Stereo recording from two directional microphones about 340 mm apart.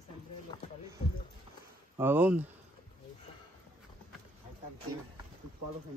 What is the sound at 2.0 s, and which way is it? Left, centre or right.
Speech, centre.